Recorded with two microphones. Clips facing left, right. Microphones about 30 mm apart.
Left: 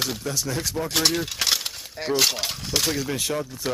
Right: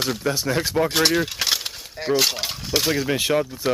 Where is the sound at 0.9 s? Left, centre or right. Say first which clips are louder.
Right 4 dB; centre.